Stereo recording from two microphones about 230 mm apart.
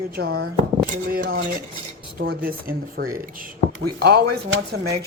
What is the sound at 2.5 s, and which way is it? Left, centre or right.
Speech, right.